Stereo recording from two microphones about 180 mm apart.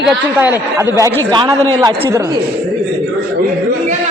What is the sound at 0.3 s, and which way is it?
Speech, 10° right (ahead or behind).